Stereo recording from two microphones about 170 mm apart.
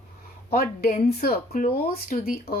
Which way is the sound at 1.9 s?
60° left (ahead or behind).